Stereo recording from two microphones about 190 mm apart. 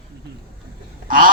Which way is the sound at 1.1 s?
45° right (ahead or behind).